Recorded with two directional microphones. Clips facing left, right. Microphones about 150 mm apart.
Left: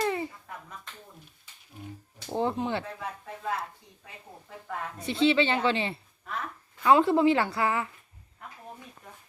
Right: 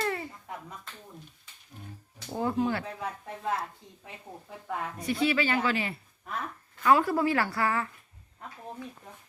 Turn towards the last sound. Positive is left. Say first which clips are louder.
# left 1 dB
turn(degrees=20)  # may be behind; listen again after turning